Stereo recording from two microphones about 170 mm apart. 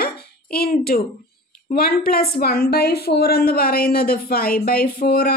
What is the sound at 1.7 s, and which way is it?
A woman's voice, 60° left (ahead or behind).